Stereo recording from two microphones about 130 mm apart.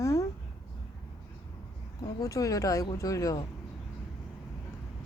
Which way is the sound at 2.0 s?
25° left (ahead or behind).